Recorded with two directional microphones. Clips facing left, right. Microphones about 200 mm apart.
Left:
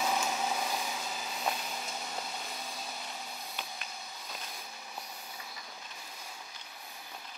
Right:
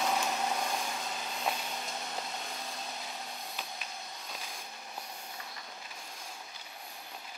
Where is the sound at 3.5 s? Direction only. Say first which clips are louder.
Right 1 dB; centre (ahead or behind).